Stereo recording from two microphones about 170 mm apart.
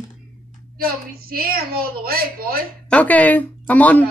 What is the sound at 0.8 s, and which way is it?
A woman's voice, 60° right (ahead or behind).